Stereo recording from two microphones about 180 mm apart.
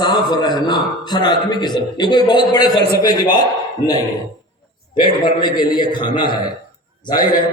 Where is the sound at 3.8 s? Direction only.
15° right (ahead or behind).